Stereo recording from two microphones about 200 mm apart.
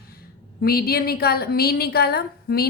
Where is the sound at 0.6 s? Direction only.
50° left (ahead or behind).